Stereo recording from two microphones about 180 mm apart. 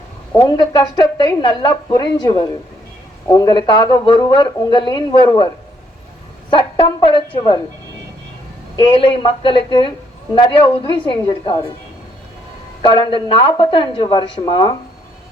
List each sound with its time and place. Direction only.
0.4 s speech: 25° left (ahead or behind)
6.5 s speech: 30° left (ahead or behind)
9.0 s speech: 30° left (ahead or behind)
12.8 s speech: 25° left (ahead or behind)